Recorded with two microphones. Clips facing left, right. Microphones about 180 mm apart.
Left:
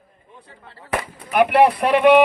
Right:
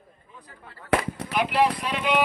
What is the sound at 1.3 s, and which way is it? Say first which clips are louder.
Speech: left 8 dB; 60° left (ahead or behind).